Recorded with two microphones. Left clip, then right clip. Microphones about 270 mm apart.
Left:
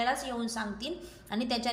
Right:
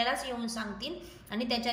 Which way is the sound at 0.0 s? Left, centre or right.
Centre.